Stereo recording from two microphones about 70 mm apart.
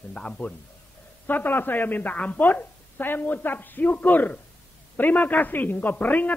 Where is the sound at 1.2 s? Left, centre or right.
Left.